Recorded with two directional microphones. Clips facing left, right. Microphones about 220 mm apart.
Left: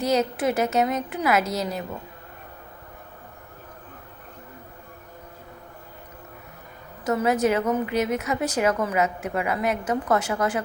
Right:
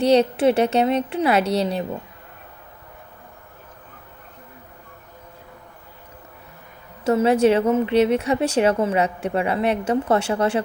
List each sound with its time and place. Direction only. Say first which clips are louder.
0.0 s a woman's voice: right 6 dB; 30° right (ahead or behind)
7.0 s a woman's voice: right 5 dB; 30° right (ahead or behind)